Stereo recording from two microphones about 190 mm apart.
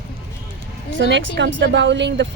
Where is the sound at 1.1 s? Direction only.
70° right (ahead or behind).